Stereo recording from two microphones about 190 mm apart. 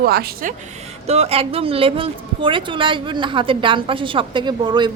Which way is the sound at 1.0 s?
35° right (ahead or behind).